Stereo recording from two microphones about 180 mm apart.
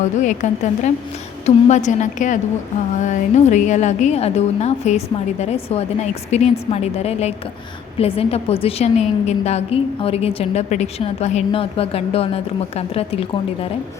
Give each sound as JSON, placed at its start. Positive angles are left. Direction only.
{"t": 0.2, "sound": "a woman's voice", "side_deg": 40}